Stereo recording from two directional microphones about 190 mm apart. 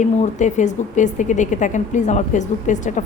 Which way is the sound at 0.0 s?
40° left (ahead or behind).